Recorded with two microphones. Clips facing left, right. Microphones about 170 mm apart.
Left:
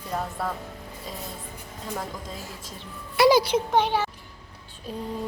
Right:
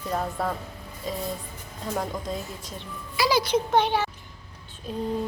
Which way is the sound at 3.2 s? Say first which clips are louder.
Left 6 dB; 50° left (ahead or behind).